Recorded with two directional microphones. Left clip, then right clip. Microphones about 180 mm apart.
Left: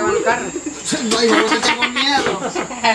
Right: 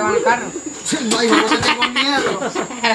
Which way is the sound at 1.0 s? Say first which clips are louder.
Even; 55° right (ahead or behind).